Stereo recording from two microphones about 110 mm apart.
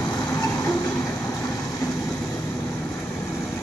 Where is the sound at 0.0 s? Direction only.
40° left (ahead or behind).